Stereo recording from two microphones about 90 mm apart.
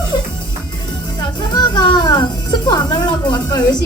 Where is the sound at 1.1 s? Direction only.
55° left (ahead or behind).